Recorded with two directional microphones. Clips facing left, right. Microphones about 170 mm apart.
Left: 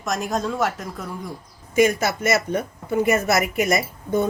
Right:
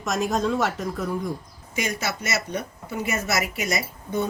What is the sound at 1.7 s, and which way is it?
A woman's voice, 50° left (ahead or behind).